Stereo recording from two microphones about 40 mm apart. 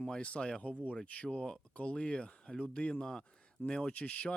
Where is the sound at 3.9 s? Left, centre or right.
Left.